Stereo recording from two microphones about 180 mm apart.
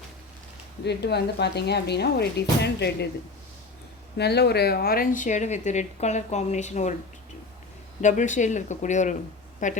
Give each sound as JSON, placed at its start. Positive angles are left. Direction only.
{"t": 0.9, "sound": "speech", "side_deg": 70}
{"t": 4.2, "sound": "a woman's voice", "side_deg": 65}
{"t": 8.0, "sound": "speech", "side_deg": 45}